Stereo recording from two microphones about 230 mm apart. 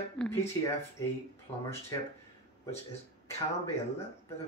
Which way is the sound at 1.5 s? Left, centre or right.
Centre.